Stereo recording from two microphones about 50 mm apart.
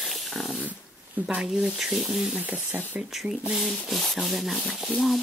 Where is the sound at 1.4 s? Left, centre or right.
Centre.